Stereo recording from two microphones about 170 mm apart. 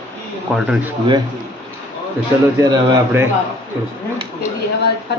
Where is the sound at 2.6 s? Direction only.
15° right (ahead or behind).